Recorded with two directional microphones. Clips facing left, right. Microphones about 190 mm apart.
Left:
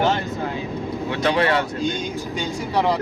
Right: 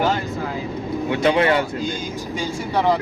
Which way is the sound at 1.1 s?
25° right (ahead or behind).